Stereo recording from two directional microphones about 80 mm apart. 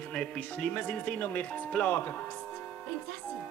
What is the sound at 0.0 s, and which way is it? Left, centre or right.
A woman's voice, centre.